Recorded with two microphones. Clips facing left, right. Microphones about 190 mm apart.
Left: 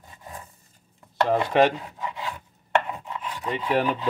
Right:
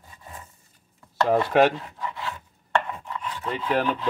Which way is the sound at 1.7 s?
15° left (ahead or behind).